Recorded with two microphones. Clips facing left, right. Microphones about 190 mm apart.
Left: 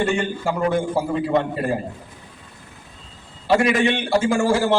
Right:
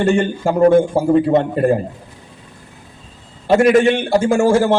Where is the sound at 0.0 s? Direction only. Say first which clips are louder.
Right 6 dB; 40° right (ahead or behind).